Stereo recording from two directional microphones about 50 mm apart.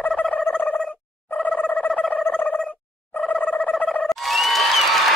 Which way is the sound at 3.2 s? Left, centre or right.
Left.